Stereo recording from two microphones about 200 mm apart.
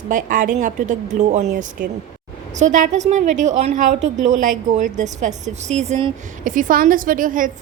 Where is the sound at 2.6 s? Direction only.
40° right (ahead or behind).